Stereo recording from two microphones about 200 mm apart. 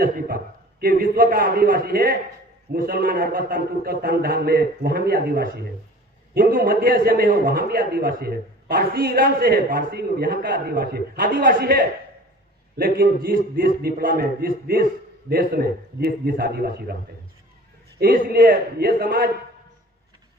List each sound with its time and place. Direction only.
0.0 s a man's voice: 45° right (ahead or behind)
18.0 s a man's voice: 50° right (ahead or behind)